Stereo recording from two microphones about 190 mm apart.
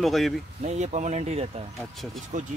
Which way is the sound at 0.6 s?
35° right (ahead or behind).